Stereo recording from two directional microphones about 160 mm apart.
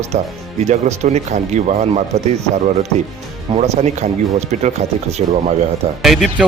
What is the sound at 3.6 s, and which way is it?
Speech, 45° right (ahead or behind).